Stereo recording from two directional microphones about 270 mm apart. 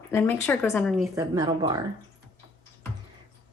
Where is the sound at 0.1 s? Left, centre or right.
Centre.